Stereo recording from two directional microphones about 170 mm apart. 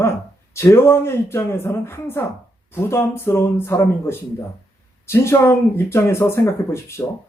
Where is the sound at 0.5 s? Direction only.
15° left (ahead or behind).